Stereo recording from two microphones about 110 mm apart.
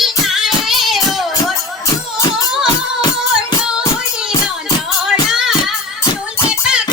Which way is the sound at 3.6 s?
5° right (ahead or behind).